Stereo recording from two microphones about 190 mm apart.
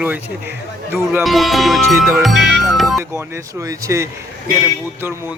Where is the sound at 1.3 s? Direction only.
Centre (ahead or behind).